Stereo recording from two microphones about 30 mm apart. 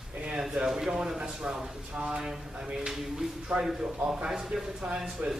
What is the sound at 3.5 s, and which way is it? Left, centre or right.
Speech, right.